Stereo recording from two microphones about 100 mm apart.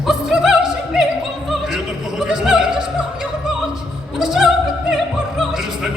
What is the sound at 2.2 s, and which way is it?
Opera, 5° right (ahead or behind).